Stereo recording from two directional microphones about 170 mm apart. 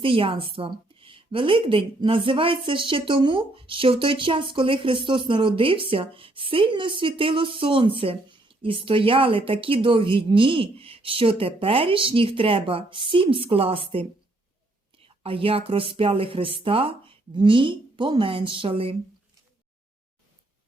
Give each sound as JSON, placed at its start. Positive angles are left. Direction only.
{"t": 0.0, "sound": "a woman's voice", "side_deg": -30}